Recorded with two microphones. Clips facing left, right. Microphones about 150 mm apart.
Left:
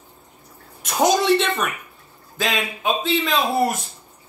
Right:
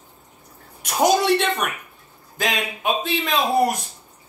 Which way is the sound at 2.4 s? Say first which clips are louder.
Left 1 dB; 15° right (ahead or behind).